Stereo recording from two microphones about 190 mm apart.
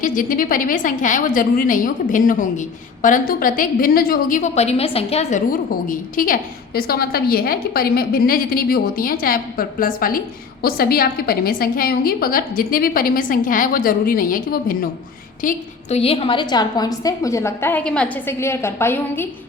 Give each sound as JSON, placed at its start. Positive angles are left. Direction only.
{"t": 0.0, "sound": "a woman's voice", "side_deg": 45}
{"t": 5.5, "sound": "a woman's voice", "side_deg": 45}
{"t": 16.0, "sound": "a woman's voice", "side_deg": 30}